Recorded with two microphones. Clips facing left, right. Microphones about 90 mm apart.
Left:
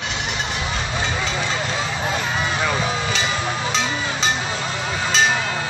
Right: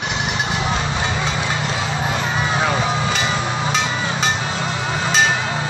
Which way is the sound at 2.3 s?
25° right (ahead or behind).